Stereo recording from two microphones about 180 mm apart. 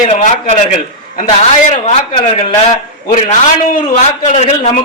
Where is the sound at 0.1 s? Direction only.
45° left (ahead or behind).